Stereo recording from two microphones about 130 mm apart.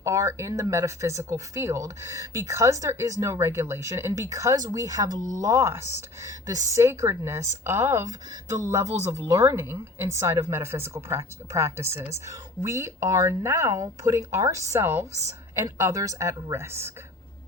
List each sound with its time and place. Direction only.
0.0 s speech: 25° right (ahead or behind)